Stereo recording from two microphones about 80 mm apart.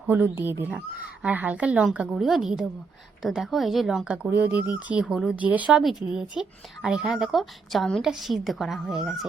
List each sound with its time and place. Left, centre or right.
0.1 s a woman's voice: right; by 4.2 s centre
4.3 s speech: right
5.8 s a woman's voice: centre